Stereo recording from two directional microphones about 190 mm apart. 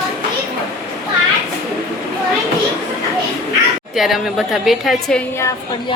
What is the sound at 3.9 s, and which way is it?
A woman's voice, centre (ahead or behind).